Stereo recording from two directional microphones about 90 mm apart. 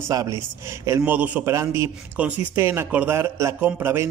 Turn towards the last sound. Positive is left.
turn(degrees=-25)  # may be behind; listen again after turning